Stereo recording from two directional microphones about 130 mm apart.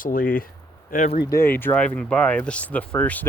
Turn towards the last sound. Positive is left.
turn(degrees=10)  # may be behind; listen again after turning